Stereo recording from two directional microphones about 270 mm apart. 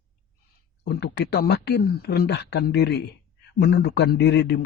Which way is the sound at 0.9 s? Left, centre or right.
Left.